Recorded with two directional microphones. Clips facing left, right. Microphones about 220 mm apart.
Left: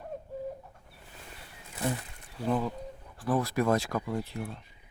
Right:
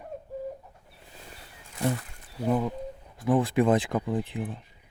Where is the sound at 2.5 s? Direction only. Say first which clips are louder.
Right 3 dB; 5° right (ahead or behind).